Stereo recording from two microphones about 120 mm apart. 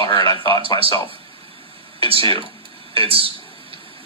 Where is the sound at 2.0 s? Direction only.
50° right (ahead or behind).